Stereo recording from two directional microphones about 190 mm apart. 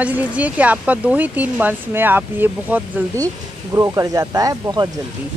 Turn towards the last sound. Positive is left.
turn(degrees=-20)  # may be behind; listen again after turning